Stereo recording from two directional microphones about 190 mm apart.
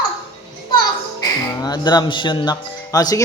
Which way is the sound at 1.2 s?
20° left (ahead or behind).